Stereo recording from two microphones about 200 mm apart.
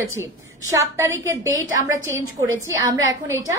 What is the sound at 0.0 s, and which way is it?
A woman's voice, 15° right (ahead or behind).